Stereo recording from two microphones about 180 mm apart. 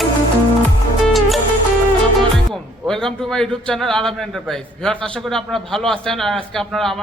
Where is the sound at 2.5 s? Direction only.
5° left (ahead or behind).